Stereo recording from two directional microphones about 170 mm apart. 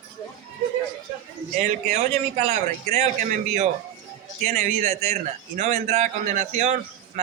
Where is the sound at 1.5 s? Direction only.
45° right (ahead or behind).